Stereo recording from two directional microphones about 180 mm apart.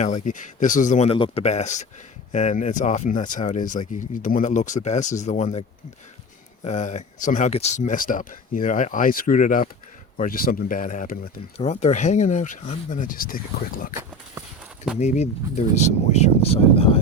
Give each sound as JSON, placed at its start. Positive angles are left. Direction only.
{"t": 0.0, "sound": "speech", "side_deg": 40}
{"t": 6.7, "sound": "speech", "side_deg": 40}
{"t": 11.5, "sound": "speech", "side_deg": 35}
{"t": 14.9, "sound": "speech", "side_deg": 40}